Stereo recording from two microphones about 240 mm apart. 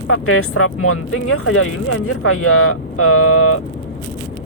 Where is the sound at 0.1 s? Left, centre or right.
Left.